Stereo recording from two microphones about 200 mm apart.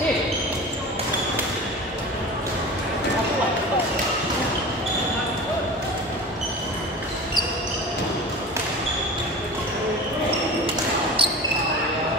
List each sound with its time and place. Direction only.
11.2 s basketball bounce: 25° right (ahead or behind)